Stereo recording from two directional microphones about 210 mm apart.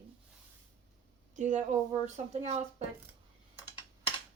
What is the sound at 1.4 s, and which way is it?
Speech, 35° right (ahead or behind).